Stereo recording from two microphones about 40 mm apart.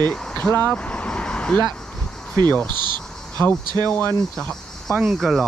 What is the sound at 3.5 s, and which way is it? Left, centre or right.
Speech, left.